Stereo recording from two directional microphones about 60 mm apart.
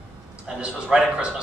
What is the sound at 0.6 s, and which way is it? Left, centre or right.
Speech, centre.